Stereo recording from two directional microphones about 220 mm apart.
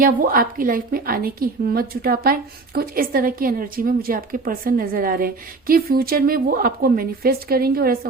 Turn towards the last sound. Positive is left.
turn(degrees=-45)  # may be behind; listen again after turning